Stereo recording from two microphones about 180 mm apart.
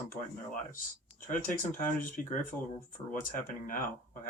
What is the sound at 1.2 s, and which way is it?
Speech, 50° left (ahead or behind).